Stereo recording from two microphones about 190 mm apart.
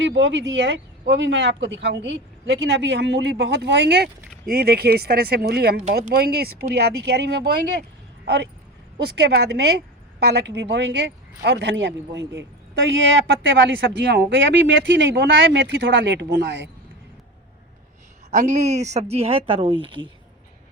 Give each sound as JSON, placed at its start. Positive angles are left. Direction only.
{"t": 0.0, "sound": "speech", "side_deg": -70}
{"t": 4.4, "sound": "a woman's voice", "side_deg": -50}
{"t": 18.3, "sound": "speech", "side_deg": -40}